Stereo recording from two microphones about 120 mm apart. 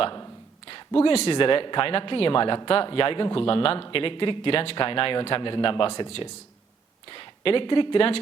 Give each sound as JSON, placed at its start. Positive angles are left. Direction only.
{"t": 0.7, "sound": "speech", "side_deg": 50}